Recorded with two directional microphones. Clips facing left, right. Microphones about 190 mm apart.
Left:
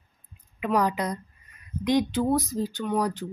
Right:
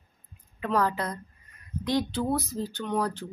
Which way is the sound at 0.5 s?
15° left (ahead or behind).